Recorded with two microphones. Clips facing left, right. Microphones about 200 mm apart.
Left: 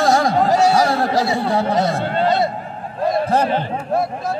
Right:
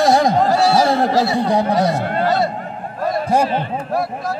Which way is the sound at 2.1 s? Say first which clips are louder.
Left 2 dB; 20° left (ahead or behind).